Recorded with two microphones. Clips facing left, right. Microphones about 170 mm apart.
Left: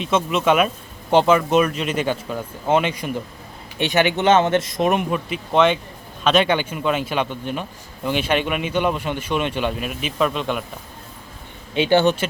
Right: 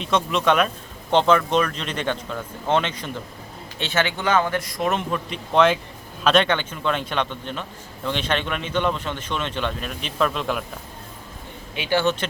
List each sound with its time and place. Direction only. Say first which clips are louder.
0.0 s a man's voice: left 2 dB; 5° left (ahead or behind)
11.7 s speech: left 5 dB; 25° left (ahead or behind)